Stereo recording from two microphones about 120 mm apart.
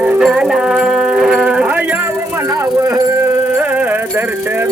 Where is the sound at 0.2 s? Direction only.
5° right (ahead or behind).